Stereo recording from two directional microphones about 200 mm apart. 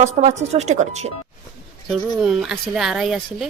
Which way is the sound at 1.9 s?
Centre (ahead or behind).